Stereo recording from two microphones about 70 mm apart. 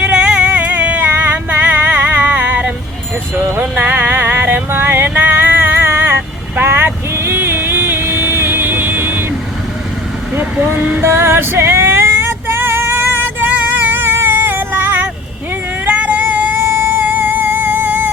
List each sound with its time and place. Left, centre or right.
0.0 s music: centre
5.8 s vehicle: right
10.3 s female singing: right
15.9 s vehicle: right
16.7 s music: right